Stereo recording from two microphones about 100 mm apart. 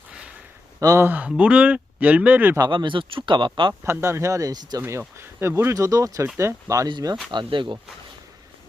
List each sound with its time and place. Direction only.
0.1 s a sound: 10° right (ahead or behind)
0.8 s speech: 35° right (ahead or behind)
1.0 s speech: 15° right (ahead or behind)
2.6 s speech: 50° right (ahead or behind)
3.8 s speech: 25° right (ahead or behind)
4.8 s speech: 25° right (ahead or behind)
6.8 s speech: 45° right (ahead or behind)